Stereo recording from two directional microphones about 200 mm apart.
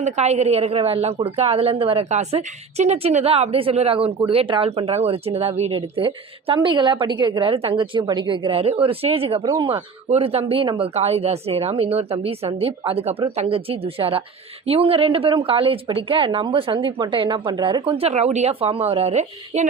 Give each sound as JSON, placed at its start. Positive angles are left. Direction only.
{"t": 0.0, "sound": "a woman's voice", "side_deg": -35}